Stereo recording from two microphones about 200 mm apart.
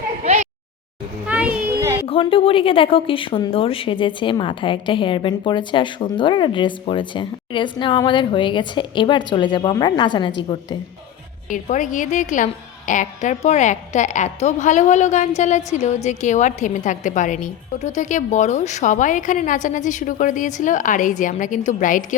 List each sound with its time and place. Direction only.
1.3 s children playing: 5° right (ahead or behind)
2.0 s speech: 25° left (ahead or behind)
11.4 s a woman's voice: 40° left (ahead or behind)